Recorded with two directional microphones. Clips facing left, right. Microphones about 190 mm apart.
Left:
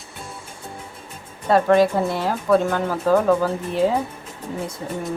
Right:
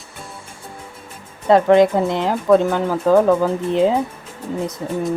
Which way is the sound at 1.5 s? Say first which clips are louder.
Right 4 dB; 20° right (ahead or behind).